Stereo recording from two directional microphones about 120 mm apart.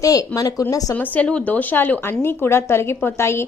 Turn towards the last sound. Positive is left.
turn(degrees=20)  # may be behind; listen again after turning